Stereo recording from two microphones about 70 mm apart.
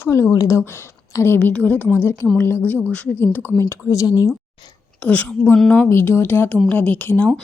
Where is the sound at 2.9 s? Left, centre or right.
Centre.